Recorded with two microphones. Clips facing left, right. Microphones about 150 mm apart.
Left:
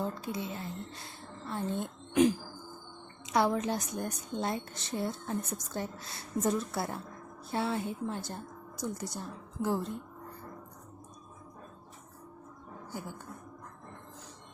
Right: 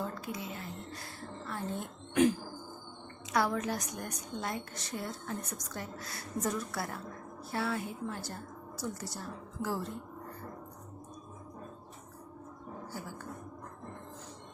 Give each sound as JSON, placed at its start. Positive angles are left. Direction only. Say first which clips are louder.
{"t": 0.0, "sound": "speech", "louder": "left 3 dB", "side_deg": 25}
{"t": 0.9, "sound": "a sound", "louder": "right 3 dB", "side_deg": 25}
{"t": 3.2, "sound": "a woman's voice", "louder": "left 3 dB", "side_deg": 20}